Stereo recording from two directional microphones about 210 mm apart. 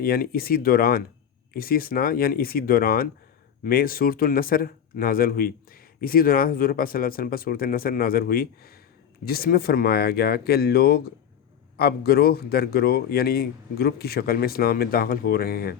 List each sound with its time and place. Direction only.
0.0 s speech: 45° left (ahead or behind)